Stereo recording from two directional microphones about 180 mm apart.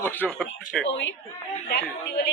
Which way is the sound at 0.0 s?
5° left (ahead or behind).